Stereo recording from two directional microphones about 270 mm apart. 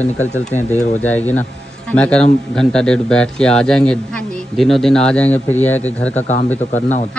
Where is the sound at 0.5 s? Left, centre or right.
Centre.